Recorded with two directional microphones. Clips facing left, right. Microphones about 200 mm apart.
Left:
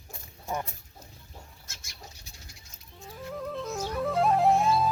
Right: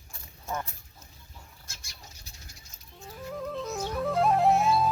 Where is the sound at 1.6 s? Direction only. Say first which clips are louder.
Even; 30° right (ahead or behind).